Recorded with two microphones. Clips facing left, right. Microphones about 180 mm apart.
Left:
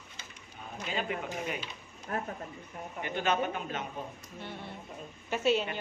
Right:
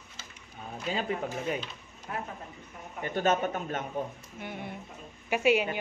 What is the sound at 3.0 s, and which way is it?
Speech, 45° right (ahead or behind).